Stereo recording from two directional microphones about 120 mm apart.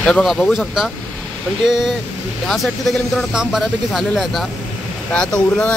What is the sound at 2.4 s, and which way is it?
Speech, centre (ahead or behind).